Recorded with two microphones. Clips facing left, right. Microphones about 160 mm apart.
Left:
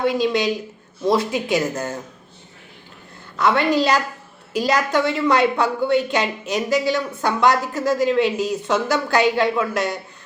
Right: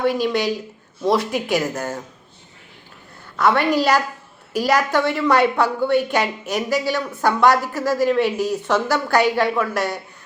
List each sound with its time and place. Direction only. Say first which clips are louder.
0.0 s a woman's voice: even; 20° left (ahead or behind)
3.4 s a woman's voice: even; 20° left (ahead or behind)